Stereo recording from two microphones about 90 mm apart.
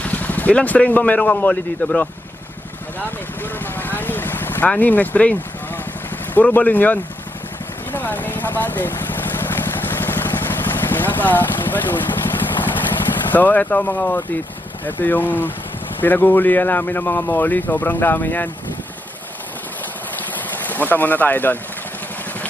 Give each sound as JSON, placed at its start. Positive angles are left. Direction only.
{"t": 0.0, "sound": "speech", "side_deg": 20}
{"t": 3.4, "sound": "a man's voice", "side_deg": 20}
{"t": 7.9, "sound": "vehicle", "side_deg": 20}
{"t": 13.3, "sound": "a man's voice", "side_deg": 20}
{"t": 20.1, "sound": "boat", "side_deg": 20}